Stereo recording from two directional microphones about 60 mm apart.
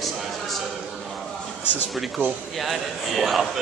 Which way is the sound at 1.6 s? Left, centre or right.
Left.